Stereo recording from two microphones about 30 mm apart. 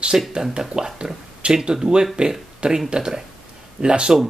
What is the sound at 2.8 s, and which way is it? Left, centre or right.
A man's voice, right.